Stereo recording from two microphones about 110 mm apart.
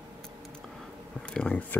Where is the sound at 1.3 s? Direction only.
10° left (ahead or behind).